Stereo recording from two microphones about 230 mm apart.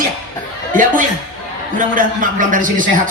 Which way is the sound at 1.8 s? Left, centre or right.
Right.